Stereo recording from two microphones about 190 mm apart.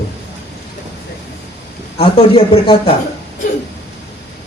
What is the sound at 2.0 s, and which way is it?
Speech, 30° left (ahead or behind).